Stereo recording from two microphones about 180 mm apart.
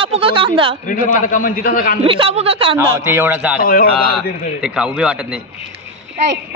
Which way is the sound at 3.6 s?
55° left (ahead or behind).